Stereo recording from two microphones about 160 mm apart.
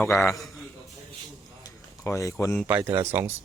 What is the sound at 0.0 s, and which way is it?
Speech, centre (ahead or behind).